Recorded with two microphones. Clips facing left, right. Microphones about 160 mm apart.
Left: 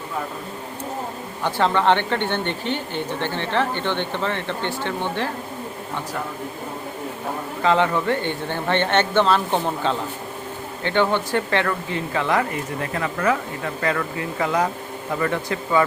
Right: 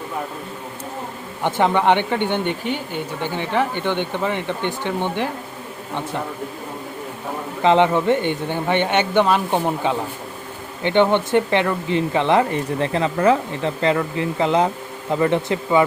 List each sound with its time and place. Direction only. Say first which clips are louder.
1.4 s speech: right 2 dB; 20° right (ahead or behind)
7.6 s speech: right 4 dB; 20° right (ahead or behind)